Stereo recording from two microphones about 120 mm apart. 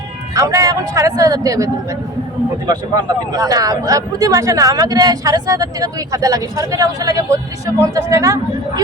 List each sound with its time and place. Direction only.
0.3 s speech: 30° right (ahead or behind)